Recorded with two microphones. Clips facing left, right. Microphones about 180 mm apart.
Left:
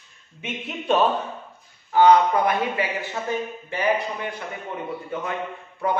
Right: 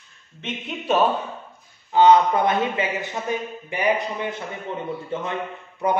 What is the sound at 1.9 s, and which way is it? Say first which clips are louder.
A man's voice: right 1 dB; 20° right (ahead or behind).